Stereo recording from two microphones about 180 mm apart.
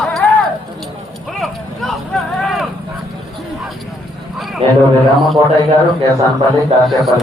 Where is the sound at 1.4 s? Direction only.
Centre (ahead or behind).